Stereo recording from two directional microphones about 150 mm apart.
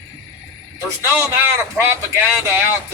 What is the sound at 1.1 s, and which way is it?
Speech, 15° right (ahead or behind).